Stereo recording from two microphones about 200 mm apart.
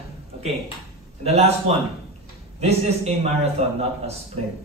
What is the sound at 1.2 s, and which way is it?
A man's voice, 30° right (ahead or behind).